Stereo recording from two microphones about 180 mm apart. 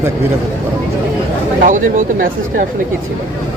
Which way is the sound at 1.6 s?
45° right (ahead or behind).